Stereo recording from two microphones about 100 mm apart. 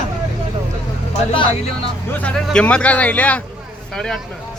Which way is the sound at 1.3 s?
65° left (ahead or behind).